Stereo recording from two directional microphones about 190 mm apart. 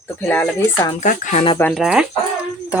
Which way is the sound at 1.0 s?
40° left (ahead or behind).